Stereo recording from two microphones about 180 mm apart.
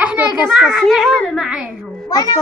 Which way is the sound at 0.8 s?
Centre (ahead or behind).